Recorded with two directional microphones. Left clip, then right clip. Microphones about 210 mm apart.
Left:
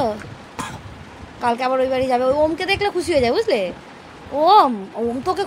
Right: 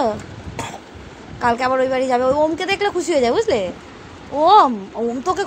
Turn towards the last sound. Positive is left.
turn(degrees=5)  # may be behind; listen again after turning